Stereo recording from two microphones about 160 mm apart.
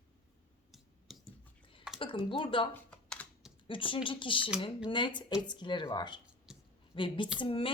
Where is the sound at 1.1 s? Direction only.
Centre (ahead or behind).